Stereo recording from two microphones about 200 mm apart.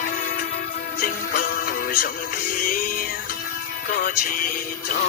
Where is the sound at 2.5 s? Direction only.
45° left (ahead or behind).